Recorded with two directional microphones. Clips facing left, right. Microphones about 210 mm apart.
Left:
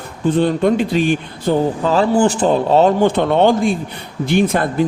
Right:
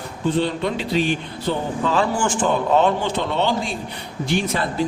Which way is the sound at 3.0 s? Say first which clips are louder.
Left 9 dB; 55° left (ahead or behind).